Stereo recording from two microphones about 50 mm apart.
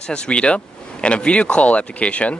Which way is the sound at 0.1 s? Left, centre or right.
Left.